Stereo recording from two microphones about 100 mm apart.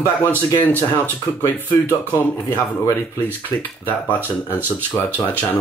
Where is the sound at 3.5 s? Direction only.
15° left (ahead or behind).